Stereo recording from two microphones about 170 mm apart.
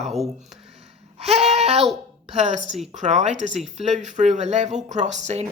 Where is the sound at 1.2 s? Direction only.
40° right (ahead or behind).